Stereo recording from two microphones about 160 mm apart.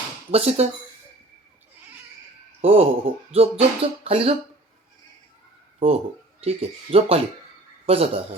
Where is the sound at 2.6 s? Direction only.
40° right (ahead or behind).